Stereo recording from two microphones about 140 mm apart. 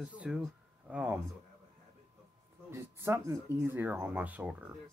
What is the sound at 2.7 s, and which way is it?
Speech, 20° right (ahead or behind).